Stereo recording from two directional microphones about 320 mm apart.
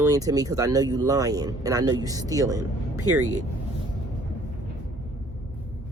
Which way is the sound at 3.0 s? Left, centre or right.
Right.